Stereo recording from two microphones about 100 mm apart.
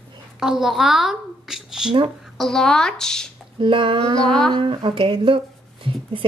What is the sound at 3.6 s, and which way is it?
Speech, 55° right (ahead or behind).